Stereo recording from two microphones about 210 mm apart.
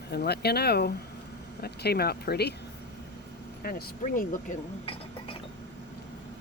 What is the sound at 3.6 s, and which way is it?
Speech, 40° left (ahead or behind).